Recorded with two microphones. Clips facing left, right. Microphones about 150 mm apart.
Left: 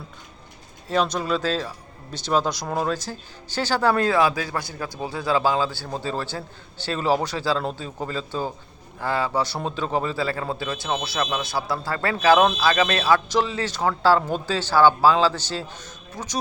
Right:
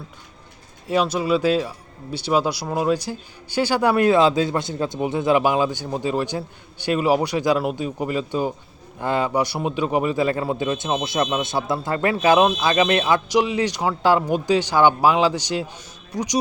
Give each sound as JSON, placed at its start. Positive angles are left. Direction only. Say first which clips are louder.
{"t": 0.9, "sound": "a man's voice", "louder": "right 3 dB", "side_deg": -10}